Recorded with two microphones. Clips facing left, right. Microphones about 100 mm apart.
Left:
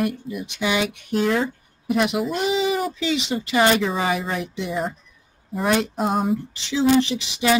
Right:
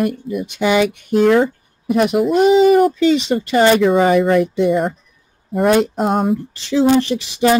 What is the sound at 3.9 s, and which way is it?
Speech, 55° right (ahead or behind).